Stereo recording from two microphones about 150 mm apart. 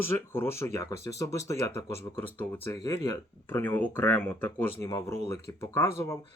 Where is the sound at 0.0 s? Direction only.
15° left (ahead or behind).